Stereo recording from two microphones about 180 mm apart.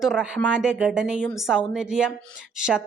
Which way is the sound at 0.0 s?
Centre (ahead or behind).